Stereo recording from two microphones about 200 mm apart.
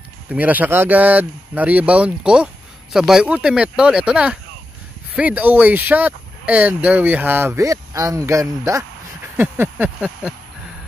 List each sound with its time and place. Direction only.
0.3 s speech: 10° right (ahead or behind)